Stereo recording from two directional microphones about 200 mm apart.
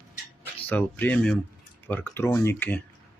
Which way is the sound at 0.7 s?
10° left (ahead or behind).